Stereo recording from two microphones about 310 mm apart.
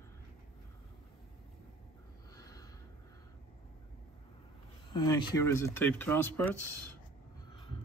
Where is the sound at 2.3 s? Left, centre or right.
Centre.